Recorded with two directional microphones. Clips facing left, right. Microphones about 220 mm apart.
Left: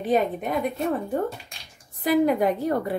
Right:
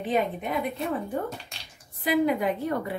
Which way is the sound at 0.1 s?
45° left (ahead or behind).